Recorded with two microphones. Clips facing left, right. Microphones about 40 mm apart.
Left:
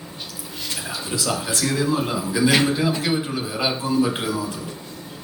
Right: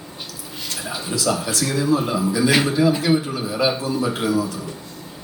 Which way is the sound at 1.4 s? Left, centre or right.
Left.